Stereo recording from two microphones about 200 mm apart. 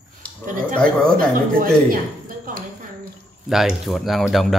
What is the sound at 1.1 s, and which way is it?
Speech, 45° right (ahead or behind).